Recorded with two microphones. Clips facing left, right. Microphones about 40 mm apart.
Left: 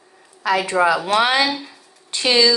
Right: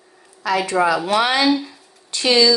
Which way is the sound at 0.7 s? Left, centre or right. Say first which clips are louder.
Even; centre.